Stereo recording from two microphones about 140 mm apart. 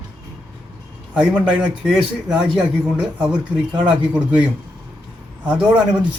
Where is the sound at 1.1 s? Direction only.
10° right (ahead or behind).